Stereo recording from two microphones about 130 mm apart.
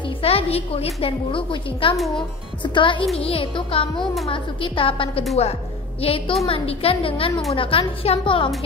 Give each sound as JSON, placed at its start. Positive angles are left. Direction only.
{"t": 0.2, "sound": "a woman's voice", "side_deg": 50}
{"t": 4.0, "sound": "a woman's voice", "side_deg": 0}
{"t": 4.3, "sound": "a woman's voice", "side_deg": 40}